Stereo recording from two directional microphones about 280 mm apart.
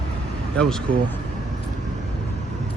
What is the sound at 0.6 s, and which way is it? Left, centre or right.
Speech, centre.